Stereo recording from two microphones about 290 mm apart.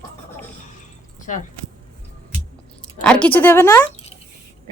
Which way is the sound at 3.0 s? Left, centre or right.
Centre.